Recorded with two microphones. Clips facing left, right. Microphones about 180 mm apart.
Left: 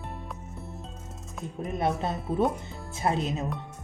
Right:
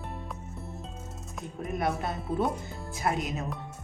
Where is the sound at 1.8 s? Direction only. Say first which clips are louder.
Left 3 dB; 25° left (ahead or behind).